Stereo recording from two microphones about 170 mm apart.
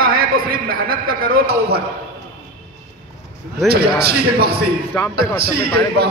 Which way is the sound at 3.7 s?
65° right (ahead or behind).